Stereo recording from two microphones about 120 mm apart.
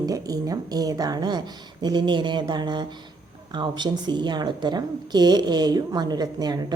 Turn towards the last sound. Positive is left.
turn(degrees=-35)  # may be behind; listen again after turning